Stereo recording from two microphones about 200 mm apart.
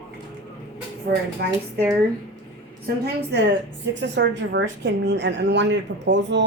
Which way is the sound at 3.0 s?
60° right (ahead or behind).